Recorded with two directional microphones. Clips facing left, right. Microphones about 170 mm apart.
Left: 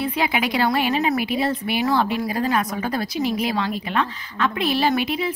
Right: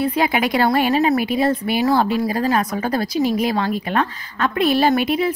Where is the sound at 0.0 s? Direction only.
40° right (ahead or behind).